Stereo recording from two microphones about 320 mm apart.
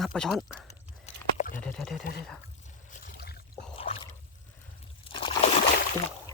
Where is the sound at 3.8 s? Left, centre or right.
Centre.